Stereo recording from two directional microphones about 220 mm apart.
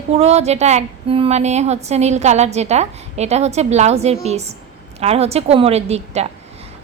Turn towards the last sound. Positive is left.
turn(degrees=-30)  # may be behind; listen again after turning